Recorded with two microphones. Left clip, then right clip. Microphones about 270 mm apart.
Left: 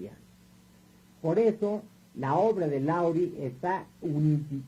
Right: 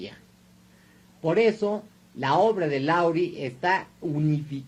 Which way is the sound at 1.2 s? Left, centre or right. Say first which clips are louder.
Right 4 dB; right.